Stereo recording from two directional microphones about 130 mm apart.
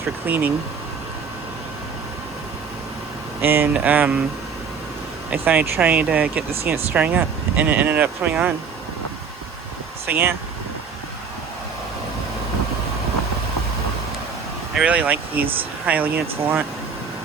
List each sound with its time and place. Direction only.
0.3 s speech: 15° right (ahead or behind)
3.4 s speech: 15° right (ahead or behind)
5.3 s speech: 10° right (ahead or behind)
10.1 s speech: 15° right (ahead or behind)
14.8 s speech: 10° right (ahead or behind)